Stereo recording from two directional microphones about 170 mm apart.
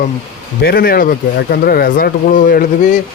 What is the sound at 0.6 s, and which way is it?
A man's voice, 60° left (ahead or behind).